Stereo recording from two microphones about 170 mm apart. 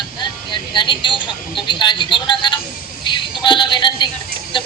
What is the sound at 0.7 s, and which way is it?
A woman's voice, 30° left (ahead or behind).